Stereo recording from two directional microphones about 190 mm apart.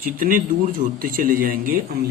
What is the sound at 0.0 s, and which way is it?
Speech, 45° right (ahead or behind).